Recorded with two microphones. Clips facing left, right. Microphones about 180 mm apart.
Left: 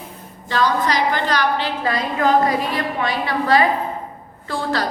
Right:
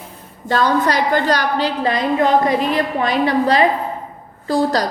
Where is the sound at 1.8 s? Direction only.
20° right (ahead or behind).